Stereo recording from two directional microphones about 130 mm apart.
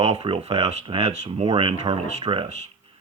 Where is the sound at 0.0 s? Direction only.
50° right (ahead or behind).